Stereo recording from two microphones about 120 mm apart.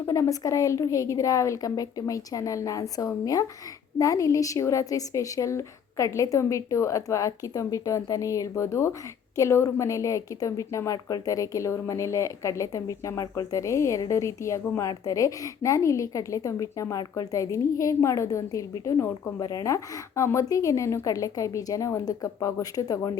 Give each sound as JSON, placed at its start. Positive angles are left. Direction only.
{"t": 0.0, "sound": "a woman's voice", "side_deg": 25}